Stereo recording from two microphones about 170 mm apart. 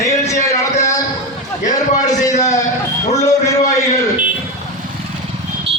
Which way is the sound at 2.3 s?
40° left (ahead or behind).